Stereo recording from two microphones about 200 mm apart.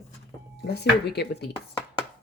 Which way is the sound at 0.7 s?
55° left (ahead or behind).